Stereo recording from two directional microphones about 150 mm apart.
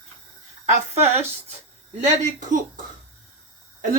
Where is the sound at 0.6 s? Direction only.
45° right (ahead or behind).